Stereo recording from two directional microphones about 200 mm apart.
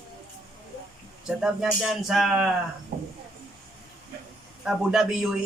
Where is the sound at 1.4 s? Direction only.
Centre (ahead or behind).